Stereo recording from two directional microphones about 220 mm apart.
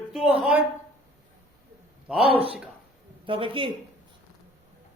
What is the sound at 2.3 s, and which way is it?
Speech, 25° right (ahead or behind).